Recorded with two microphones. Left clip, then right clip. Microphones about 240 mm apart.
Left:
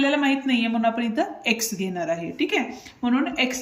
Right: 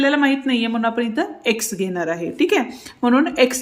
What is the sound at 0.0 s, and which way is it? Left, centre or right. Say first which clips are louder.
A woman's voice: right 4 dB; centre.